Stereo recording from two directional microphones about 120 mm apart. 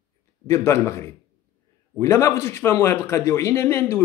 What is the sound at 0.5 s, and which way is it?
Speech, 25° left (ahead or behind).